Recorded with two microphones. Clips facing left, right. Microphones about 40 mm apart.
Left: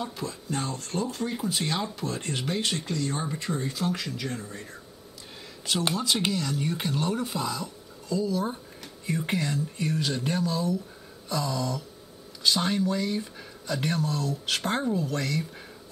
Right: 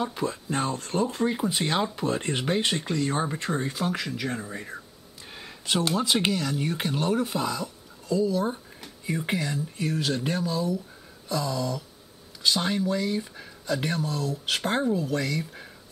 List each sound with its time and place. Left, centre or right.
0.0 s speech: centre
5.9 s speech: centre